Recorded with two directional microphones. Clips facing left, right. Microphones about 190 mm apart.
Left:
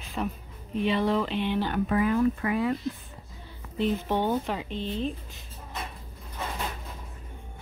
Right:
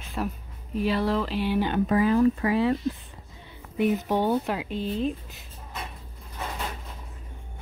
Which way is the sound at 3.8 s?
10° right (ahead or behind).